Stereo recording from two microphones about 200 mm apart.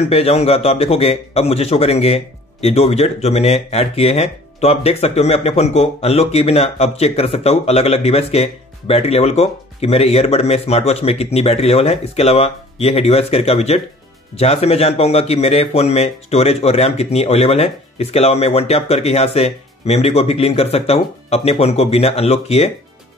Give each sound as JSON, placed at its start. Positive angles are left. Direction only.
{"t": 0.0, "sound": "speech", "side_deg": 30}